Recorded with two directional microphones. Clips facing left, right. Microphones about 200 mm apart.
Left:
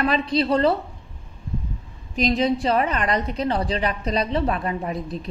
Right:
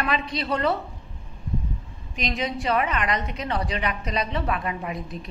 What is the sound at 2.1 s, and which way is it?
A woman's voice, 35° left (ahead or behind).